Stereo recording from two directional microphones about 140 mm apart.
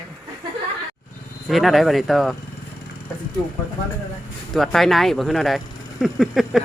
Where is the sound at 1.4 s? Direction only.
Centre (ahead or behind).